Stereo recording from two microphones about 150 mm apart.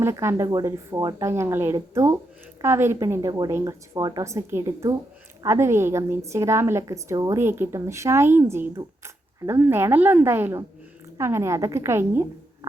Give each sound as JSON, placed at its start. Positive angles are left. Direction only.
{"t": 0.0, "sound": "a woman's voice", "side_deg": -15}